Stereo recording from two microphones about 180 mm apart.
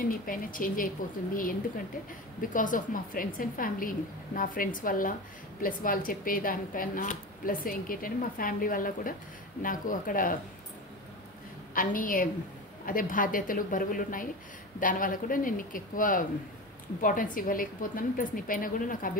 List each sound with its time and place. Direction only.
0.0 s speech: 50° left (ahead or behind)
2.5 s speech: 50° left (ahead or behind)
11.7 s speech: 50° left (ahead or behind)